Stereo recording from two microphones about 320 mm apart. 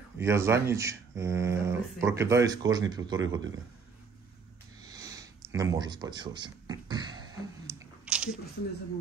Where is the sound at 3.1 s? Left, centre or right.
Right.